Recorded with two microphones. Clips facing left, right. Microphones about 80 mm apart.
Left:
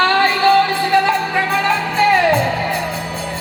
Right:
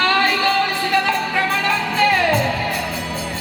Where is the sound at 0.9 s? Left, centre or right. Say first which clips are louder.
Left 5 dB; left.